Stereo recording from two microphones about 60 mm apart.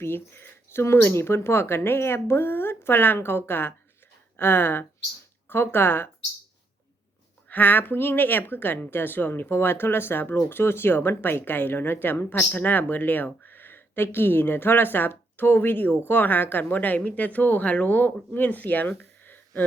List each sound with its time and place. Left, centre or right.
0.0 s speech: left
7.4 s speech: left